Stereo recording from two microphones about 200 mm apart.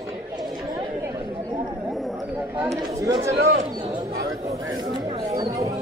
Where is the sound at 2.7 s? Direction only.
15° right (ahead or behind).